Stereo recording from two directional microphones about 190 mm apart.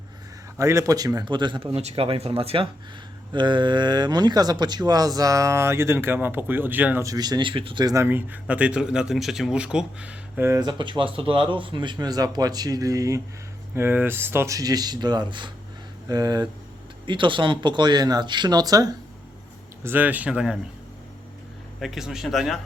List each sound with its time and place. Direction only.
0.5 s speech: 15° right (ahead or behind)
21.8 s speech: centre (ahead or behind)